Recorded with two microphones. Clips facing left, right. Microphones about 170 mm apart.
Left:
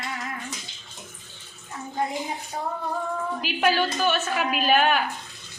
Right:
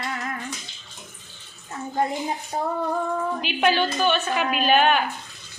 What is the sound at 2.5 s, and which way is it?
Female singing, 40° right (ahead or behind).